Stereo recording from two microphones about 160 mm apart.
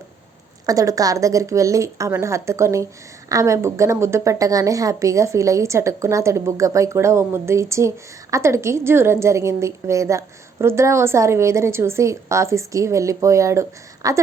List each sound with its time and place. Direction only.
0.6 s a woman's voice: 20° right (ahead or behind)